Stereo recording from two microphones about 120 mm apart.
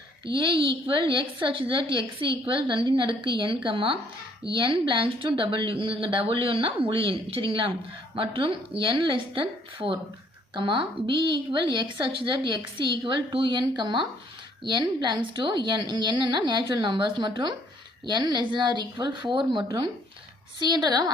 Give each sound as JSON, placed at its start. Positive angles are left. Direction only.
{"t": 0.3, "sound": "a woman's voice", "side_deg": -45}